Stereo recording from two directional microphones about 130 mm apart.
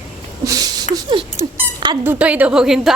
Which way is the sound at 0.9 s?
40° right (ahead or behind).